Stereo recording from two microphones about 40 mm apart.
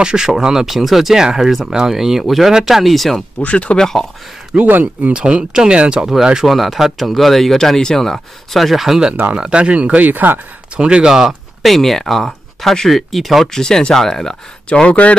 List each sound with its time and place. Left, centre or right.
0.0 s speech: centre
3.3 s speech: left
3.7 s speech: centre
4.6 s speech: right
5.1 s speech: right
6.4 s speech: centre
9.3 s speech: right
10.8 s speech: right
11.1 s speech: centre
11.6 s speech: centre
13.5 s speech: centre
14.7 s speech: left